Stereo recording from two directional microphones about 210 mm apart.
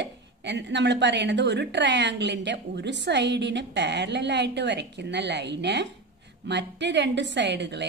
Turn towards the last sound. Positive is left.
turn(degrees=-55)  # may be behind; listen again after turning